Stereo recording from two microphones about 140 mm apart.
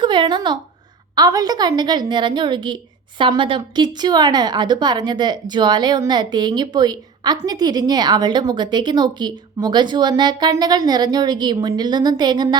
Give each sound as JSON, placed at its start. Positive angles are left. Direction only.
{"t": 0.0, "sound": "a woman's voice", "side_deg": -35}